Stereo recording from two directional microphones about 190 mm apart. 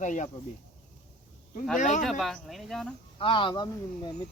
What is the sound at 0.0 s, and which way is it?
Speech, 40° left (ahead or behind).